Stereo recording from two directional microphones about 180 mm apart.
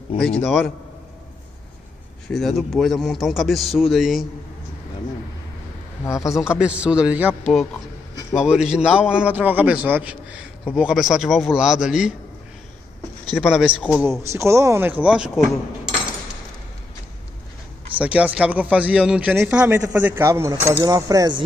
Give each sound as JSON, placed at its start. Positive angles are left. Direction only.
{"t": 2.2, "sound": "a man's voice", "side_deg": 0}
{"t": 6.0, "sound": "speech", "side_deg": 15}
{"t": 6.5, "sound": "a man's voice", "side_deg": -5}
{"t": 13.3, "sound": "a man's voice", "side_deg": 0}
{"t": 14.3, "sound": "speech", "side_deg": -15}
{"t": 17.9, "sound": "speech", "side_deg": -5}